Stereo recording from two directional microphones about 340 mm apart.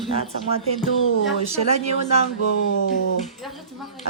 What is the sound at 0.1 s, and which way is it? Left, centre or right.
Speech, centre.